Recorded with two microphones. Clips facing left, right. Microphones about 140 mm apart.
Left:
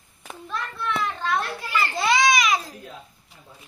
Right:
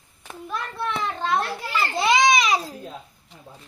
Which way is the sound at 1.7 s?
20° right (ahead or behind).